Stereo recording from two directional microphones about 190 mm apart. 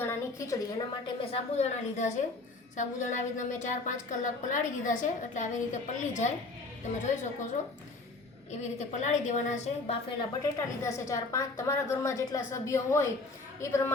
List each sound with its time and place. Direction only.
0.0 s a sound: 15° left (ahead or behind)
1.3 s a woman's voice: 35° left (ahead or behind)
8.6 s a woman's voice: 40° left (ahead or behind)
10.2 s a woman's voice: 15° left (ahead or behind)